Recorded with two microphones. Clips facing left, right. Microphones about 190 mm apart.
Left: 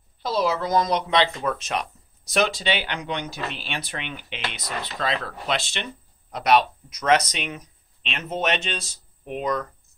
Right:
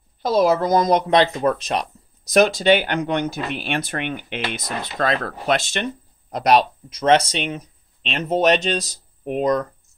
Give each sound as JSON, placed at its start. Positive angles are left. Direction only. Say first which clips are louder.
{"t": 0.2, "sound": "speech", "louder": "right 7 dB", "side_deg": -45}